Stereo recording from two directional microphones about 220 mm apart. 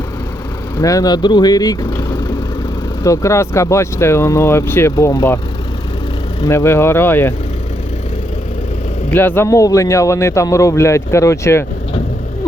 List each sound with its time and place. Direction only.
0.8 s speech: 15° left (ahead or behind)
6.4 s speech: 10° left (ahead or behind)
9.0 s speech: 10° left (ahead or behind)